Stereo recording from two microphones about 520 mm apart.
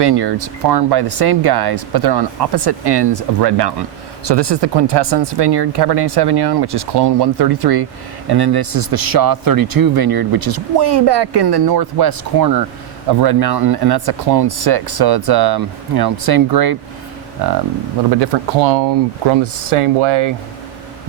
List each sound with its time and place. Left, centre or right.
0.0 s speech: right
18.1 s speech: right
19.3 s speech: right